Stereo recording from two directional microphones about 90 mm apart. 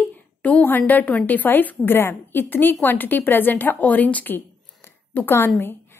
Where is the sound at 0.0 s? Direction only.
15° left (ahead or behind).